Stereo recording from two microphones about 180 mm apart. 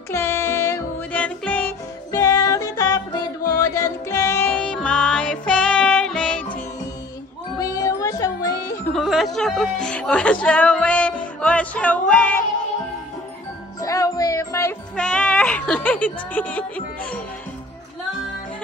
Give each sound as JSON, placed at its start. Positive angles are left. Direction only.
{"t": 0.1, "sound": "music", "side_deg": 15}
{"t": 7.5, "sound": "music", "side_deg": 20}
{"t": 8.9, "sound": "speech", "side_deg": 0}
{"t": 13.7, "sound": "music", "side_deg": 20}
{"t": 15.0, "sound": "speech", "side_deg": 5}